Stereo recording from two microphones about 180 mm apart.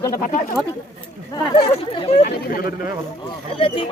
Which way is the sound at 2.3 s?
55° left (ahead or behind).